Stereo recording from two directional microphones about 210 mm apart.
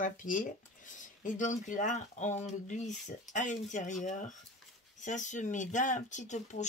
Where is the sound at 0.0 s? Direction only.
40° left (ahead or behind).